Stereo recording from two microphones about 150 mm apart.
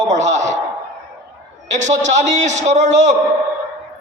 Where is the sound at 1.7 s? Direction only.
50° right (ahead or behind).